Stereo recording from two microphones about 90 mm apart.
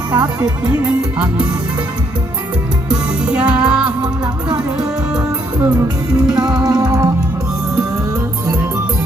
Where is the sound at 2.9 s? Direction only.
10° right (ahead or behind).